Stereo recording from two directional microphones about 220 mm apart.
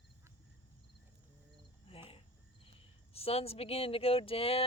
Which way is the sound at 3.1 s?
25° left (ahead or behind).